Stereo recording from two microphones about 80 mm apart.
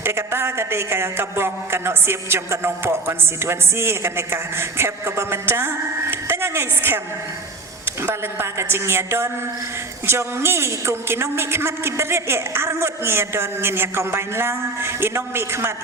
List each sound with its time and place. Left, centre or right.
0.0 s a man's voice: right
8.0 s a man's voice: right